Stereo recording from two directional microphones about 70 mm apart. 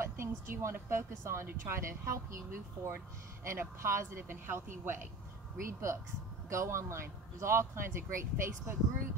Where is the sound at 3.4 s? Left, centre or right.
Right.